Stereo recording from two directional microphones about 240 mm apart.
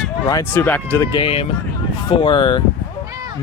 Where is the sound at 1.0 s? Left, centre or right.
Left.